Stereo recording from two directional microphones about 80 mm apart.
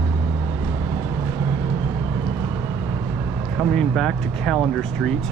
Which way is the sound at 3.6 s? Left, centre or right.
Centre.